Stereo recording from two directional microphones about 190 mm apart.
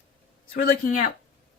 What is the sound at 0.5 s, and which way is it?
Speech, 45° left (ahead or behind).